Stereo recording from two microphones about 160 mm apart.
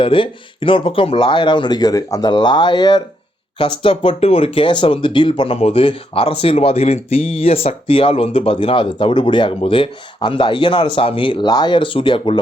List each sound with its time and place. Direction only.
0.0 s speech: 35° left (ahead or behind)